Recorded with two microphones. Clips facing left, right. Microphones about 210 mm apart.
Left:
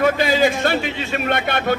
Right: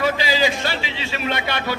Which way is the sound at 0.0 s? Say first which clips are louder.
Left 4 dB; 55° left (ahead or behind).